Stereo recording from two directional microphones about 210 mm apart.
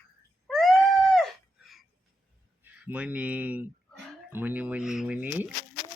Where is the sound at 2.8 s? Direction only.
5° right (ahead or behind).